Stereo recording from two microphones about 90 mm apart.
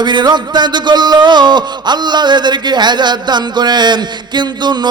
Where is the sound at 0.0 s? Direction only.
55° right (ahead or behind).